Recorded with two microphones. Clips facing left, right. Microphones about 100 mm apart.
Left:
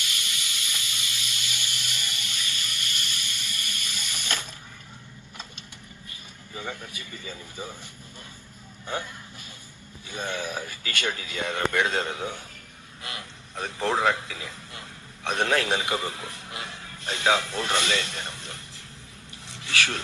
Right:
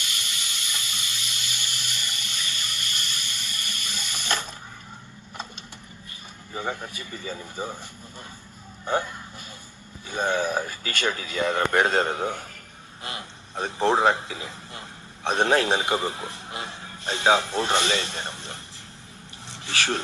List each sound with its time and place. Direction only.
0.8 s water: 35° right (ahead or behind)
6.5 s speech: 35° right (ahead or behind)
10.1 s speech: 35° right (ahead or behind)
13.0 s a man's voice: 30° right (ahead or behind)
19.5 s a sound: 30° right (ahead or behind)